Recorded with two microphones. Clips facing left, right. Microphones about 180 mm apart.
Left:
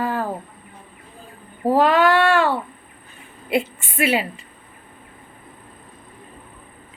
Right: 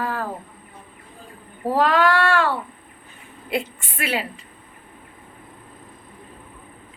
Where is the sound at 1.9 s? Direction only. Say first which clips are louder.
Left 3 dB; 25° left (ahead or behind).